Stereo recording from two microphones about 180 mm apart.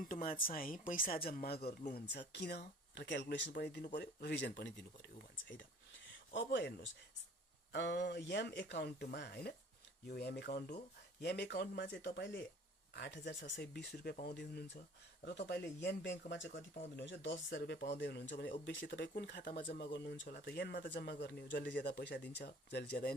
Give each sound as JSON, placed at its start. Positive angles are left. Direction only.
{"t": 0.0, "sound": "speech", "side_deg": 50}
{"t": 7.7, "sound": "speech", "side_deg": 70}
{"t": 19.4, "sound": "speech", "side_deg": 55}